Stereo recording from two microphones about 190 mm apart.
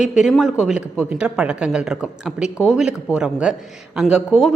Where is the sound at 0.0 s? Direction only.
Centre (ahead or behind).